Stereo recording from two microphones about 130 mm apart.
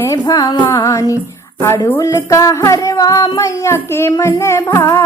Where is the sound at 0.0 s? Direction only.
25° left (ahead or behind).